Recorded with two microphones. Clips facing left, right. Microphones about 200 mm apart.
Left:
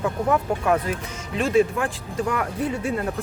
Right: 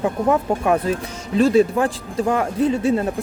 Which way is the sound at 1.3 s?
35° right (ahead or behind).